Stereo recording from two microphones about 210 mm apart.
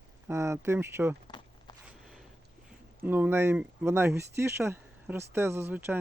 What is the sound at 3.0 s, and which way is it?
Speech, 10° right (ahead or behind).